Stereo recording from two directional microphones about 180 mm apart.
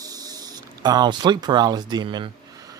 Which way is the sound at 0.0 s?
20° right (ahead or behind).